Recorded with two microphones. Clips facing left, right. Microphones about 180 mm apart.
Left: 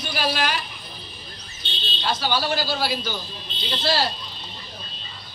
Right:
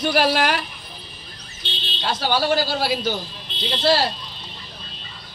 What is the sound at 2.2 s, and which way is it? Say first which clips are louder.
Speech: right 6 dB; 55° right (ahead or behind).